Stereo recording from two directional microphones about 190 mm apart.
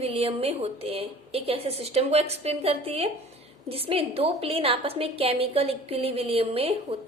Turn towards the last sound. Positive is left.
turn(degrees=-30)  # may be behind; listen again after turning